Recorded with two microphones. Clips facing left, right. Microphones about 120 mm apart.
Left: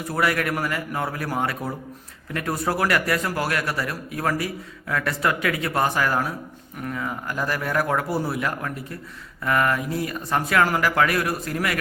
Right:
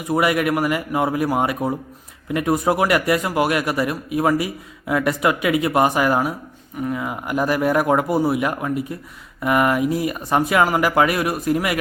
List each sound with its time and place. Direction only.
0.0 s a man's voice: 20° right (ahead or behind)